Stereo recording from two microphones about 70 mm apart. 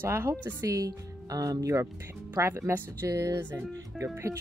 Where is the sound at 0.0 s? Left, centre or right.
Right.